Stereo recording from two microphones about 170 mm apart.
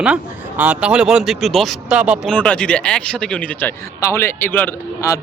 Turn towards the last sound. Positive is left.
turn(degrees=15)  # may be behind; listen again after turning